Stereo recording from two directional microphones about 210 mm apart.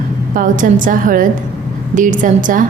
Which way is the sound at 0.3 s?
40° right (ahead or behind).